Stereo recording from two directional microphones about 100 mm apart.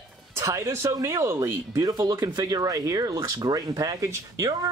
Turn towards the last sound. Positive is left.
turn(degrees=-35)  # may be behind; listen again after turning